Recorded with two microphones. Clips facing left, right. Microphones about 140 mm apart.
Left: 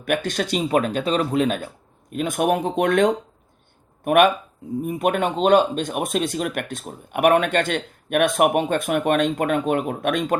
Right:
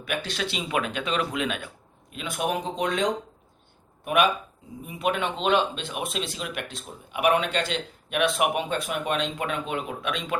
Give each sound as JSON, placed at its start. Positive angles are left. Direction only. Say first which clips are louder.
{"t": 0.0, "sound": "speech", "louder": "left 7 dB", "side_deg": 50}